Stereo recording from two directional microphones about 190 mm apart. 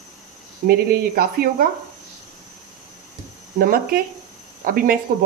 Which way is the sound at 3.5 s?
50° right (ahead or behind).